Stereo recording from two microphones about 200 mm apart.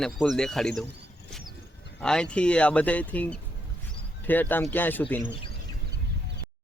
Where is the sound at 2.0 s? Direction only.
5° left (ahead or behind).